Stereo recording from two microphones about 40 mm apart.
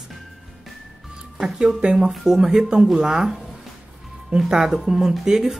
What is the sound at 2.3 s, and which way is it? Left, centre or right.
Speech, centre.